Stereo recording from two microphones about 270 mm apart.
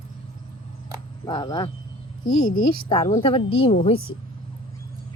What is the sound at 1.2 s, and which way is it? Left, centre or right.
Speech, centre.